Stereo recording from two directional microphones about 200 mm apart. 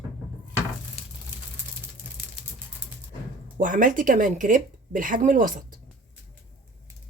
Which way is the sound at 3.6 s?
40° right (ahead or behind).